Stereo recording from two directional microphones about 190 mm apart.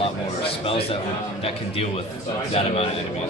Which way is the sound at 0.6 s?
30° left (ahead or behind).